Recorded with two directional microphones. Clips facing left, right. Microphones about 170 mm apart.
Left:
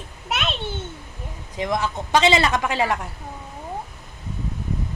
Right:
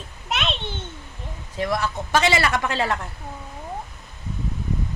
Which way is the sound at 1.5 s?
15° left (ahead or behind).